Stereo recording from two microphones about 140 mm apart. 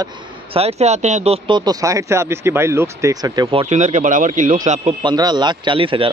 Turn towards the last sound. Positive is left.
turn(degrees=-40)  # may be behind; listen again after turning